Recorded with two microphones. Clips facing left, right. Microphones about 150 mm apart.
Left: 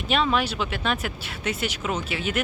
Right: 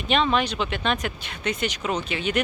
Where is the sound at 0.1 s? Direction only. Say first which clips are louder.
Right 1 dB; 5° left (ahead or behind).